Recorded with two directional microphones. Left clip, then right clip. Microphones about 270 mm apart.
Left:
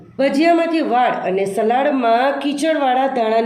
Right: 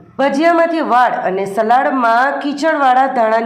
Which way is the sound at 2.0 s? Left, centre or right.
Centre.